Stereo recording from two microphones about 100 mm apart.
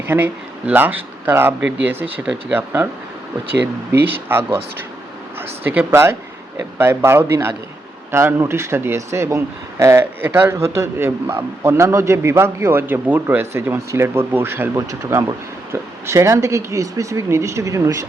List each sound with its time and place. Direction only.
0.1 s speech: 25° right (ahead or behind)
4.0 s speech: 20° right (ahead or behind)